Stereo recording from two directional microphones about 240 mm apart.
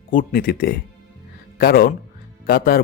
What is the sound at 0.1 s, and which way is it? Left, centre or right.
A man's voice, left.